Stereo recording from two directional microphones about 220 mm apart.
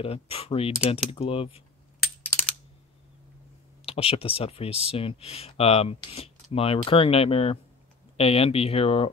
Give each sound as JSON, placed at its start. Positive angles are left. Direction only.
{"t": 0.0, "sound": "speech", "side_deg": 25}
{"t": 3.8, "sound": "speech", "side_deg": 25}